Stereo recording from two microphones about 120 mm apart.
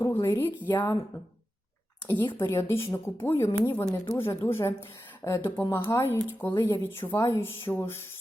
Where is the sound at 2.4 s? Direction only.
20° left (ahead or behind).